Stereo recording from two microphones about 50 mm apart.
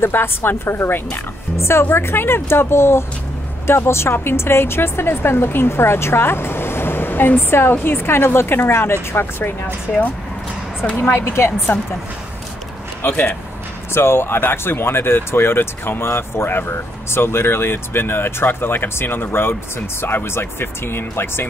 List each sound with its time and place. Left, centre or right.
0.0 s speech: left
1.6 s speech: left
9.1 s speech: left
11.0 s speech: left
13.9 s speech: left